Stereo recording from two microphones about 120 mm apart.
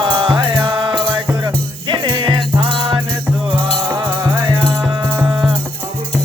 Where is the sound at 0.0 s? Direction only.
40° right (ahead or behind).